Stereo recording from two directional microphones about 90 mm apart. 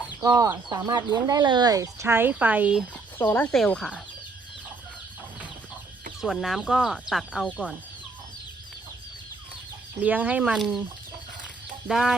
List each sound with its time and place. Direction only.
0.2 s speech: 40° right (ahead or behind); by 2.7 s 20° right (ahead or behind)
3.5 s speech: 5° left (ahead or behind)
6.2 s speech: centre (ahead or behind)
7.4 s speech: 15° left (ahead or behind)
10.0 s speech: 15° right (ahead or behind)
10.5 s speech: centre (ahead or behind)
11.9 s speech: centre (ahead or behind)